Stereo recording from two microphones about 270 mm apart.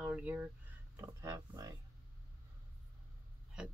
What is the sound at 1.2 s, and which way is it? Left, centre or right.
Speech, centre.